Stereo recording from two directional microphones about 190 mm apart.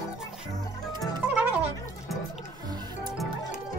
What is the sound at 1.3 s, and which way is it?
Music, 5° right (ahead or behind).